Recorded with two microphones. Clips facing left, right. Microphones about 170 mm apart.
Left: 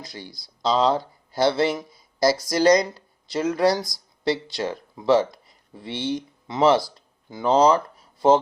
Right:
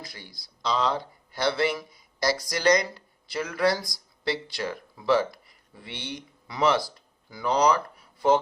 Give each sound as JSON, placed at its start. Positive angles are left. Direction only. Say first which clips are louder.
{"t": 0.0, "sound": "speech", "louder": "left 5 dB", "side_deg": 25}
{"t": 0.3, "sound": "speech", "louder": "left 8 dB", "side_deg": 0}
{"t": 0.6, "sound": "speech", "louder": "left 6 dB", "side_deg": 25}